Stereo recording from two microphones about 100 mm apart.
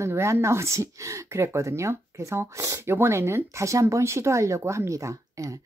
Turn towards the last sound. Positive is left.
turn(degrees=-30)  # may be behind; listen again after turning